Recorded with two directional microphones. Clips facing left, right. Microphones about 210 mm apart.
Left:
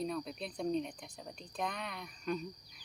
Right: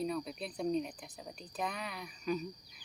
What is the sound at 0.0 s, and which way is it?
Speech, 5° right (ahead or behind).